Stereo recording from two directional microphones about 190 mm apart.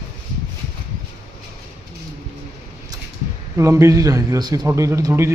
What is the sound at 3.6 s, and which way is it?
Speech, 15° right (ahead or behind).